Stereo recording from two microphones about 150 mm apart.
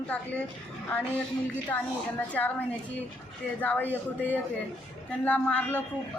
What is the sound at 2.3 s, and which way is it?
A woman's voice, 10° left (ahead or behind).